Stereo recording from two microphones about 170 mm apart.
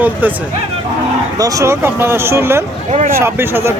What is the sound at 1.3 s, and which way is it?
Speech, 20° right (ahead or behind).